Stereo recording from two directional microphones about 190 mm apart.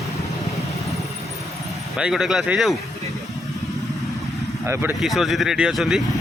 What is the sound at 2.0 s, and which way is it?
Speech, 5° right (ahead or behind).